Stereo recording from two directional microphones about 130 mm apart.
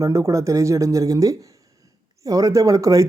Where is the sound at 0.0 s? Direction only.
25° right (ahead or behind).